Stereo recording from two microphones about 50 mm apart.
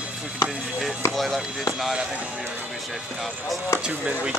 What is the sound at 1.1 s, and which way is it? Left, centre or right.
Speech, centre.